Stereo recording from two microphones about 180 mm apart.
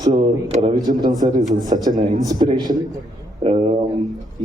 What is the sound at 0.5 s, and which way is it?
Speech, 35° right (ahead or behind).